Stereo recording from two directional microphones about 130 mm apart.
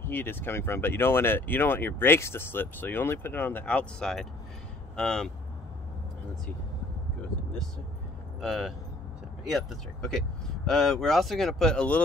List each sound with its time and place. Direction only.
0.0 s speech: 15° left (ahead or behind)
8.4 s speech: centre (ahead or behind)